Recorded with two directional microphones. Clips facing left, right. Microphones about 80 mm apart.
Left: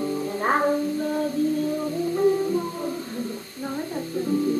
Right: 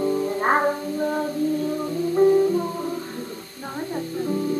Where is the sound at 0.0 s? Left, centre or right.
Right.